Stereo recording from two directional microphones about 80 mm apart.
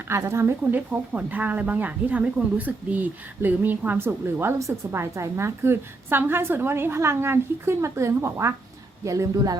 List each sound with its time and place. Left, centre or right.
0.1 s a woman's voice: right
0.6 s a woman's voice: right